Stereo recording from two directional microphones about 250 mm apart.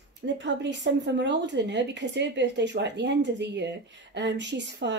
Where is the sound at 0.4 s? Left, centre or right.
Right.